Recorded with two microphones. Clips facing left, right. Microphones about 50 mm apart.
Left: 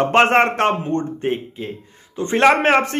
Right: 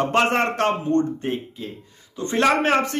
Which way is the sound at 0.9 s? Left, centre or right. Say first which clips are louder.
Even; left.